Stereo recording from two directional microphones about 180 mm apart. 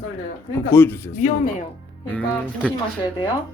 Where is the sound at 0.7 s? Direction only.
10° left (ahead or behind).